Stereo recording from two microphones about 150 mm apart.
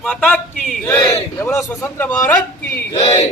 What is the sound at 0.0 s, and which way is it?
Speech, centre (ahead or behind).